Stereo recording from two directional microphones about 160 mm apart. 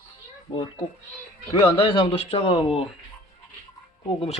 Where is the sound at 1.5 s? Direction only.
30° left (ahead or behind).